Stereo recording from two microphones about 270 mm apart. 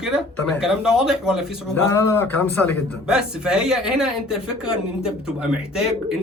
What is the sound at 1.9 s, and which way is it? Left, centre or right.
A man's voice, centre.